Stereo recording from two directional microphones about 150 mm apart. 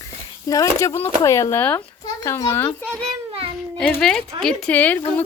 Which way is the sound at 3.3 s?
40° right (ahead or behind).